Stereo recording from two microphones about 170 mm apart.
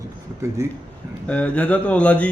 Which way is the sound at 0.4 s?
20° right (ahead or behind).